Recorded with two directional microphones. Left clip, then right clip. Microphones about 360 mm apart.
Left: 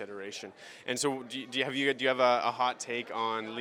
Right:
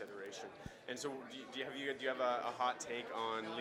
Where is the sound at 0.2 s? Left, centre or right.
Left.